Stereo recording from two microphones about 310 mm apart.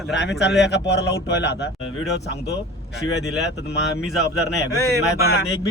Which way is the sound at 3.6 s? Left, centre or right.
Left.